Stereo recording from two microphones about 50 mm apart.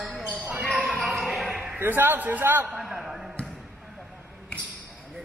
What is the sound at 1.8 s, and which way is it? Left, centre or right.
Speech, right.